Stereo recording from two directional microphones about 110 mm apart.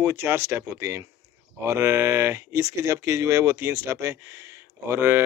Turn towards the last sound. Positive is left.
turn(degrees=-20)  # may be behind; listen again after turning